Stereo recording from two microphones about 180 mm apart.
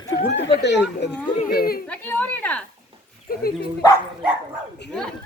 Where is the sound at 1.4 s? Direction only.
55° left (ahead or behind).